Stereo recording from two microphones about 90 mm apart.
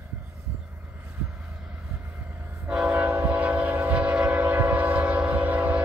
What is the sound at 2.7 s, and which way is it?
Train, 15° right (ahead or behind).